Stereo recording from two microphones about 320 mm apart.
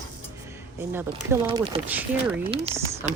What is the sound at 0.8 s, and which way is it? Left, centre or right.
Speech, centre.